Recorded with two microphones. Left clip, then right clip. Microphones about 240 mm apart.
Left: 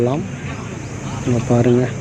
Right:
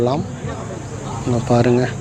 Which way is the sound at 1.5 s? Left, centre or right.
Right.